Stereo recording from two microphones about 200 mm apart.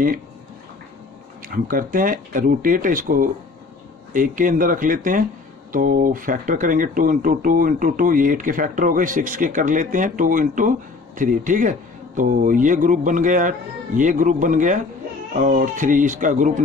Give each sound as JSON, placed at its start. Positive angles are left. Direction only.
{"t": 1.5, "sound": "speech", "side_deg": -45}